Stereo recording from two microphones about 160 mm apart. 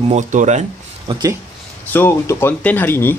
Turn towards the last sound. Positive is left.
turn(degrees=15)  # may be behind; listen again after turning